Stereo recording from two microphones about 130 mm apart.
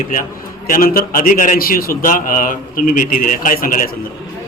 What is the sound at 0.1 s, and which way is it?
A man's voice, 90° left.